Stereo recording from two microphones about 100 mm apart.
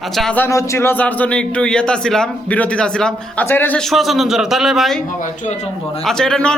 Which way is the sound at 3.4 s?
20° left (ahead or behind).